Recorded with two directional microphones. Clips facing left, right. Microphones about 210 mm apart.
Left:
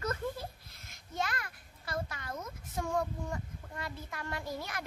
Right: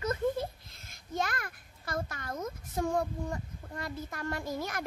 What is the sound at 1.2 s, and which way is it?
A child's voice, 45° right (ahead or behind).